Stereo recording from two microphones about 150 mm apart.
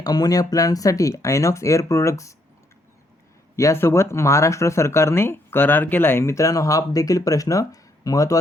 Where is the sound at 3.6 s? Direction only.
20° left (ahead or behind).